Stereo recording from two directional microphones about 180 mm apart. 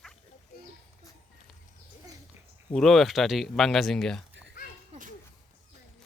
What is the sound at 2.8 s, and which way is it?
Speech, centre (ahead or behind).